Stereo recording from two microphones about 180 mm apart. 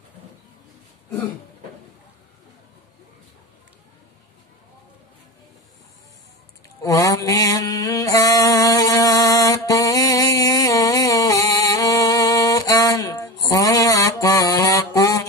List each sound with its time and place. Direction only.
6.8 s mantra: 20° left (ahead or behind)